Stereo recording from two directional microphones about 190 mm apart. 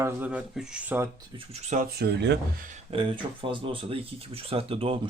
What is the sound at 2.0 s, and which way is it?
Speech, 65° right (ahead or behind).